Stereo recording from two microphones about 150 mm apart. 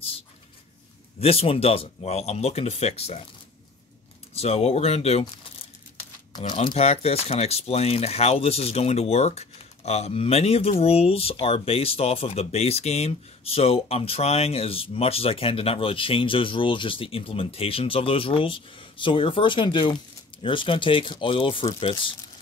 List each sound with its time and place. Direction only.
1.2 s speech: 40° left (ahead or behind)
4.3 s speech: 45° left (ahead or behind)
6.5 s speech: 40° left (ahead or behind)